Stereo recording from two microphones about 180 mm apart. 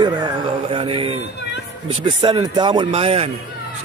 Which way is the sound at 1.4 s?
70° left (ahead or behind).